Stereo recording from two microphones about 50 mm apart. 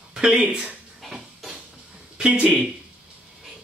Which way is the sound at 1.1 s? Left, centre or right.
Centre.